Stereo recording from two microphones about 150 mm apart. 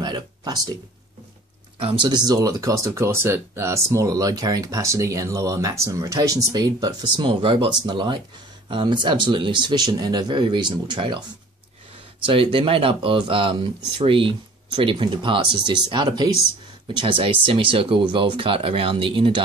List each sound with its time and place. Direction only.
0.0 s a sound: 30° right (ahead or behind)
1.8 s speech: 35° right (ahead or behind)
12.3 s speech: 35° right (ahead or behind)